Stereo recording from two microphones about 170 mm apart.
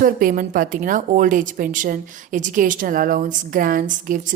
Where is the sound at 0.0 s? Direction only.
55° right (ahead or behind).